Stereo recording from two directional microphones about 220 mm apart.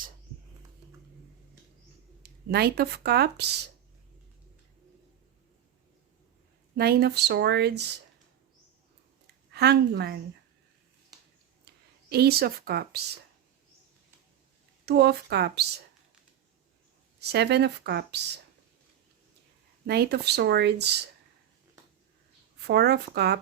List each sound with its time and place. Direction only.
2.5 s speech: 45° right (ahead or behind)
6.7 s speech: 45° right (ahead or behind)
9.5 s speech: 50° right (ahead or behind)
11.6 s speech: 45° right (ahead or behind)
14.8 s speech: 45° right (ahead or behind)
17.2 s speech: 50° right (ahead or behind)
19.9 s speech: 45° right (ahead or behind)
22.6 s speech: 50° right (ahead or behind)